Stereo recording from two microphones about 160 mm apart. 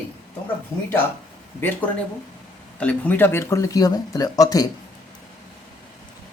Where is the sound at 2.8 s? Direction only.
10° left (ahead or behind).